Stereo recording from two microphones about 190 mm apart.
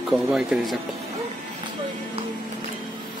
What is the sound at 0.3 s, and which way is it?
Speech, 5° right (ahead or behind).